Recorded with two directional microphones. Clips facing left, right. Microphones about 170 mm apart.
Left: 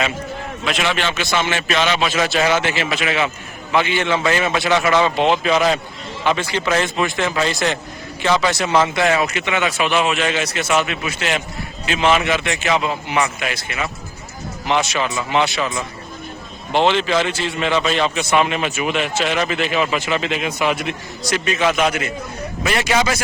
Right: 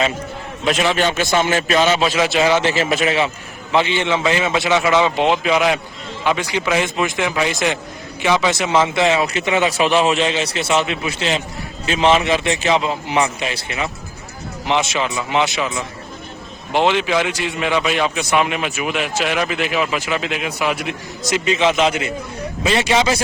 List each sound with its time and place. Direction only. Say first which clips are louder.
0.7 s a man's voice: right 4 dB; 40° right (ahead or behind)
1.4 s a man's voice: right 3 dB; 35° right (ahead or behind)
2.3 s a man's voice: right 2 dB; 20° right (ahead or behind)
2.7 s a man's voice: right 3 dB; 40° right (ahead or behind)
3.7 s a man's voice: right 1 dB; 25° right (ahead or behind)
9.2 s a man's voice: right 2 dB; 35° right (ahead or behind); by 15.6 s 20° right (ahead or behind)
16.7 s a man's voice: even; 10° right (ahead or behind)
21.2 s a man's voice: right 2 dB; 20° right (ahead or behind)